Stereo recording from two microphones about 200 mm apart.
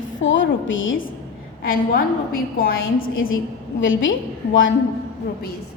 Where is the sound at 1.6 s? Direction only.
45° left (ahead or behind).